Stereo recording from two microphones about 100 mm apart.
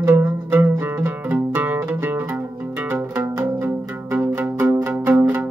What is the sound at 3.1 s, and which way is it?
Music, 30° right (ahead or behind).